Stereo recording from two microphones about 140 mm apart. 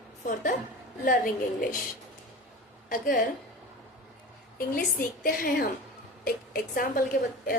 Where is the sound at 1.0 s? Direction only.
75° left (ahead or behind).